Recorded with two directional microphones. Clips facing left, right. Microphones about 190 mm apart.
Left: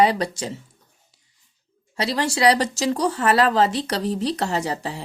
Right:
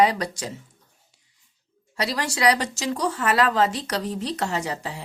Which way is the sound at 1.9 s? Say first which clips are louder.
Left 4 dB; 25° left (ahead or behind).